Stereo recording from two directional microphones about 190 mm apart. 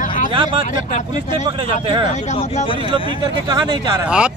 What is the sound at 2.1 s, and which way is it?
Speech, 40° left (ahead or behind).